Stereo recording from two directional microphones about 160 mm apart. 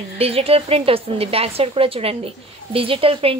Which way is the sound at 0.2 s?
40° right (ahead or behind).